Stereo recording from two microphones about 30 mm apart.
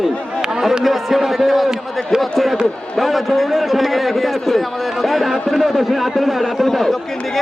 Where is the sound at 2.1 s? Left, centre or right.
Centre.